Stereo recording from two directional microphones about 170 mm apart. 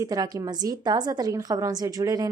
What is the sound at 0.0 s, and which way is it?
A woman's voice, 20° right (ahead or behind).